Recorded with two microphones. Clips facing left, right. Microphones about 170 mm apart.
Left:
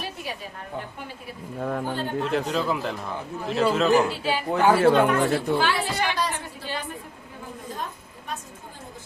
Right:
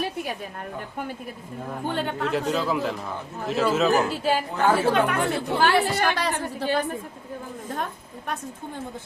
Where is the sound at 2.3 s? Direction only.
Centre (ahead or behind).